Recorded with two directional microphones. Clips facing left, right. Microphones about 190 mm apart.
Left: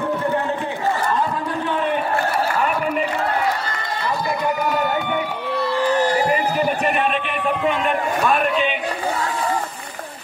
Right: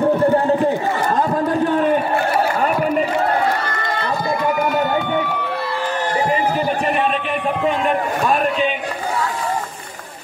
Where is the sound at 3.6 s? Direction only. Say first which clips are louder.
Right 3 dB; 60° right (ahead or behind).